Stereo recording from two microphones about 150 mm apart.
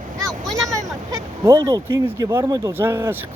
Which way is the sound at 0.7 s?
25° right (ahead or behind).